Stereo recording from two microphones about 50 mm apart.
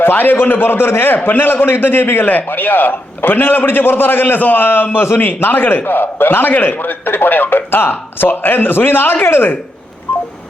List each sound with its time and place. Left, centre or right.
0.0 s a man's voice: left